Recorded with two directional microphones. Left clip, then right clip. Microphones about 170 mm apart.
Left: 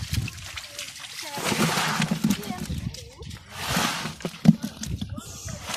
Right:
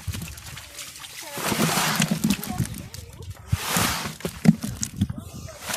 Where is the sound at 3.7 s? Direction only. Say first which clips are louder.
Right 1 dB; 25° right (ahead or behind).